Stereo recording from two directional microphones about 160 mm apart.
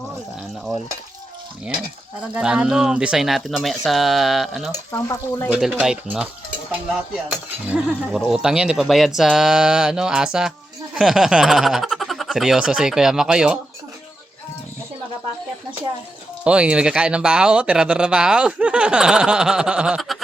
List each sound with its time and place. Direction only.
2.3 s speech: 5° right (ahead or behind)
4.9 s speech: 15° left (ahead or behind)
5.5 s speech: 5° right (ahead or behind)
7.3 s speech: 10° right (ahead or behind)
16.4 s speech: 5° right (ahead or behind)